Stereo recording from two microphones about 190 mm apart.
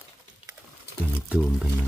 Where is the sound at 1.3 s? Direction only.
Centre (ahead or behind).